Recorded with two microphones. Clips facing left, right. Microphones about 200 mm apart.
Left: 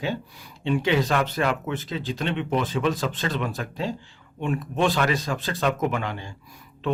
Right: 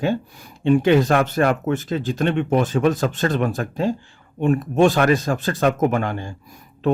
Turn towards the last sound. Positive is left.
turn(degrees=-50)  # may be behind; listen again after turning